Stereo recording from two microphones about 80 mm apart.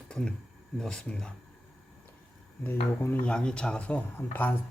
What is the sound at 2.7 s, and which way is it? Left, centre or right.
Speech, left.